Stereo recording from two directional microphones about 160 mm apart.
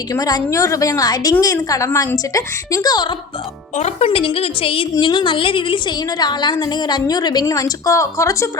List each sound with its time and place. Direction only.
0.1 s a woman's voice: 20° left (ahead or behind)
3.8 s a woman's voice: 40° left (ahead or behind); by 8.4 s 20° left (ahead or behind)